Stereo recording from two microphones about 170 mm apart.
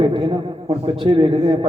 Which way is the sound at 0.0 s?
30° right (ahead or behind).